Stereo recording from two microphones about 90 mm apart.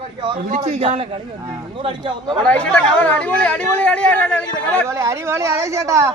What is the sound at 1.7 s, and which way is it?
Speech, 65° right (ahead or behind).